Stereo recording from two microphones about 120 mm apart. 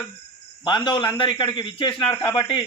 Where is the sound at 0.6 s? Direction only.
40° left (ahead or behind).